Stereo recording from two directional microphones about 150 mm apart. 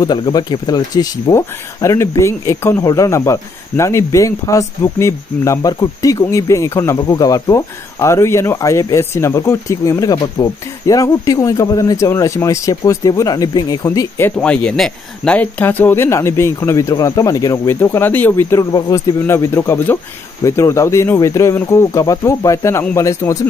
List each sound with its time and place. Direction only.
0.0 s speech: 25° left (ahead or behind)
14.3 s speech: 5° left (ahead or behind)